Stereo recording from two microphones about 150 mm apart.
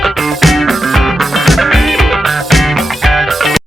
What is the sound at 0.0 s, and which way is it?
Music, centre (ahead or behind).